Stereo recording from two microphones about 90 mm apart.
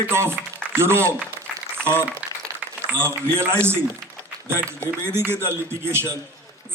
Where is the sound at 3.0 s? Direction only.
25° right (ahead or behind).